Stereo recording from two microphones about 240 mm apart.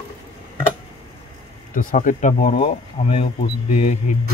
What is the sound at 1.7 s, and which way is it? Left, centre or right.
Speech, left.